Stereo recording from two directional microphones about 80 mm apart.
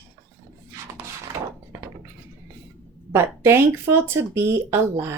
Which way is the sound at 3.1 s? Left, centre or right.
Right.